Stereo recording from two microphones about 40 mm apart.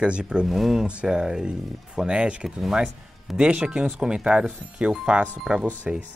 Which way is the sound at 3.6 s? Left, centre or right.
Centre.